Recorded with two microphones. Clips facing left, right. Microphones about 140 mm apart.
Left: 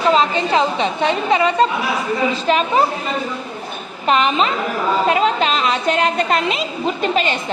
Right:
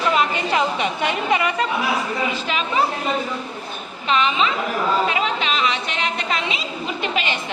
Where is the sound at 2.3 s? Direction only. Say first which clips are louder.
Left 7 dB; 40° left (ahead or behind).